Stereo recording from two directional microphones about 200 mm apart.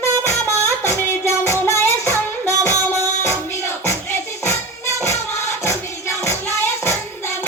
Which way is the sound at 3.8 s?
10° left (ahead or behind).